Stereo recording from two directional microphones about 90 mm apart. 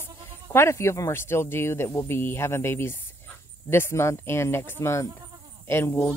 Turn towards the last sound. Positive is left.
turn(degrees=30)  # may be behind; listen again after turning